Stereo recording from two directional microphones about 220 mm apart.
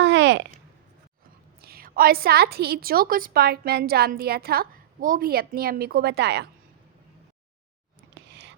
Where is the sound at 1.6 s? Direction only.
40° right (ahead or behind).